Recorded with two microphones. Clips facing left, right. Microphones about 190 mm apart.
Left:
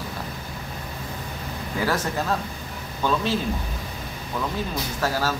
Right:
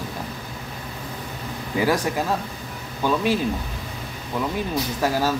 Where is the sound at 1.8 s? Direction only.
15° right (ahead or behind).